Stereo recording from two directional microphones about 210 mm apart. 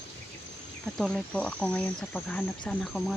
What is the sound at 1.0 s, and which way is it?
Speech, centre (ahead or behind).